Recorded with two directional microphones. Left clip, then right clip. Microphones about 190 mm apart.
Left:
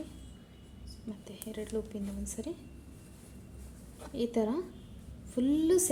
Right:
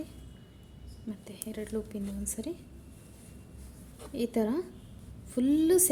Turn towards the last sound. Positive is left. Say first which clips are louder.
# right 2 dB
turn(degrees=-30)  # may be behind; listen again after turning